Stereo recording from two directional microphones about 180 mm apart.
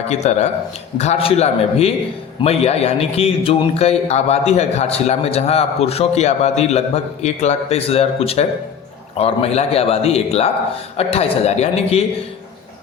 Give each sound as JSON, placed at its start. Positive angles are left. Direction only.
{"t": 0.1, "sound": "a man's voice", "side_deg": 40}